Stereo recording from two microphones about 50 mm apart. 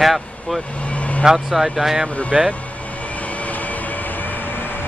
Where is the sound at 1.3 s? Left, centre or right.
Centre.